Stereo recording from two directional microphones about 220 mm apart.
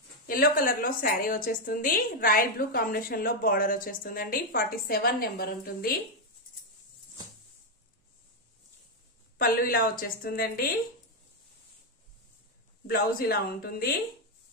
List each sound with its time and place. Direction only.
0.3 s a woman's voice: 40° left (ahead or behind)
9.4 s a woman's voice: 40° left (ahead or behind)
12.8 s speech: 45° left (ahead or behind)